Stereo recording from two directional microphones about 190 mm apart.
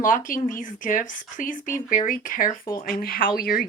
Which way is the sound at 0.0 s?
45° left (ahead or behind).